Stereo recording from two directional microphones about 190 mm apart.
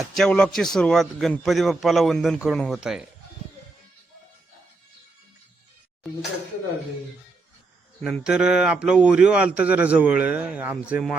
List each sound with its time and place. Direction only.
0.1 s a man's voice: 5° left (ahead or behind)
8.0 s a man's voice: 5° right (ahead or behind)